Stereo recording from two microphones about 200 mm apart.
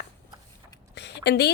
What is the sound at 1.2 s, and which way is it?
Speech, 55° left (ahead or behind).